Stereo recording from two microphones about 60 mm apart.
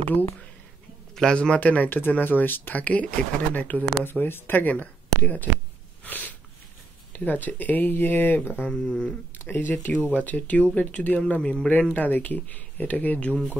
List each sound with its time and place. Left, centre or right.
1.1 s speech: centre
4.0 s speech: left
6.0 s a sound: left
7.1 s speech: left
8.6 s speech: centre
9.5 s speech: left; by 11.7 s centre
11.9 s speech: left